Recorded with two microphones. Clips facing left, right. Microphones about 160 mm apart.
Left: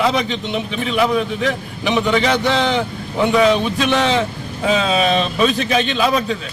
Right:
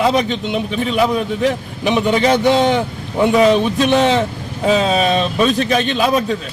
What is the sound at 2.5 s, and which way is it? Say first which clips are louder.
Speech: right 4 dB; 45° right (ahead or behind).